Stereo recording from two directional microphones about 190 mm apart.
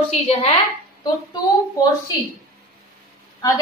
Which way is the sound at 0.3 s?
30° left (ahead or behind).